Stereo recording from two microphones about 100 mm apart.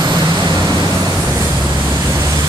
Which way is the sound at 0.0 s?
45° right (ahead or behind).